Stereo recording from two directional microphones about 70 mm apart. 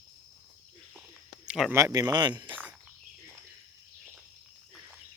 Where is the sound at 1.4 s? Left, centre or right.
Centre.